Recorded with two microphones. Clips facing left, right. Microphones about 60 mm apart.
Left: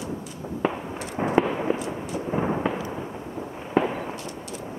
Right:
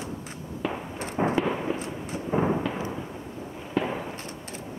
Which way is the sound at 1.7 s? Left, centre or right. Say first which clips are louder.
Left 4 dB; centre.